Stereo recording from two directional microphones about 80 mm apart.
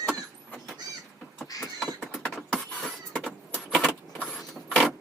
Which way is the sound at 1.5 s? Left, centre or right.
Left.